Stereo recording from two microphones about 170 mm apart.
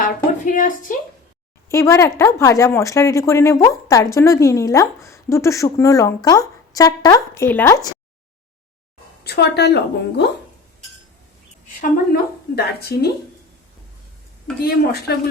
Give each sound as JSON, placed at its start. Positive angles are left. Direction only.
{"t": 0.0, "sound": "a sound", "side_deg": 50}
{"t": 1.7, "sound": "speech", "side_deg": 15}
{"t": 9.2, "sound": "a woman's voice", "side_deg": 75}
{"t": 11.8, "sound": "a woman's voice", "side_deg": 60}